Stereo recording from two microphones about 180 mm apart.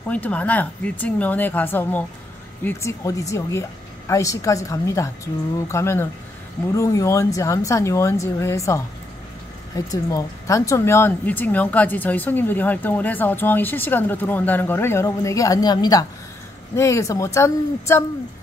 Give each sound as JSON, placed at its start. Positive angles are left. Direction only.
{"t": 0.1, "sound": "speech", "side_deg": 10}